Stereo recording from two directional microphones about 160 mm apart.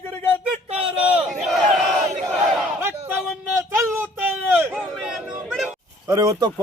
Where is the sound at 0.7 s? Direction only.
40° right (ahead or behind).